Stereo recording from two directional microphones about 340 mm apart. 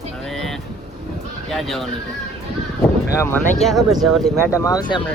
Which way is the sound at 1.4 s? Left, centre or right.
Centre.